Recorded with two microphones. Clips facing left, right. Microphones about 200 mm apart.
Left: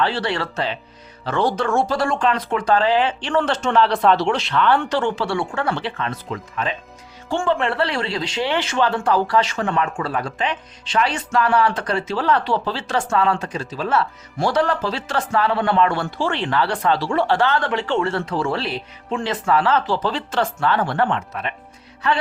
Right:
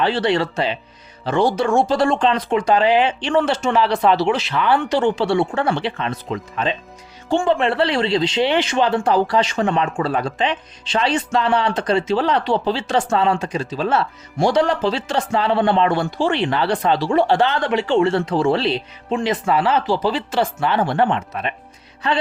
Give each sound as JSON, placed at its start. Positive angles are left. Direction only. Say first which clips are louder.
{"t": 0.0, "sound": "a man's voice", "louder": "right 4 dB", "side_deg": -20}